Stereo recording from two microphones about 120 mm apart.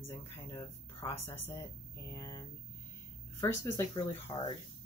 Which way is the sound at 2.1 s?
30° left (ahead or behind).